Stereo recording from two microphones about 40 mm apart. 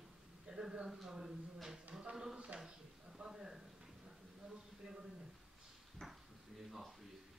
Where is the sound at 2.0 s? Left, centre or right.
Centre.